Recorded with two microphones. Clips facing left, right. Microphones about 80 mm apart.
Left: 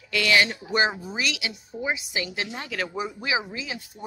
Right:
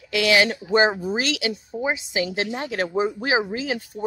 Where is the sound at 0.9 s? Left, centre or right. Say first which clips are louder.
Right 5 dB; right.